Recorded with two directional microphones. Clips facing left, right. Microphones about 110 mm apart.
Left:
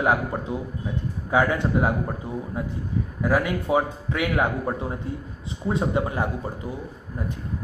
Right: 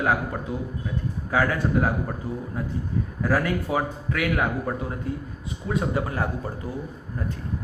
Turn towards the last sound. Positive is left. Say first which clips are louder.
# left 1 dB
turn(degrees=20)  # may be behind; listen again after turning